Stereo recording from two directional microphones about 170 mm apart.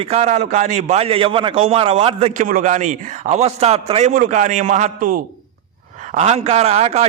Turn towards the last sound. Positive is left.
turn(degrees=-40)  # may be behind; listen again after turning